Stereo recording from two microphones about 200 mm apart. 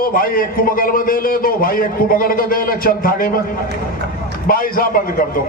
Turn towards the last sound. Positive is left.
turn(degrees=45)  # may be behind; listen again after turning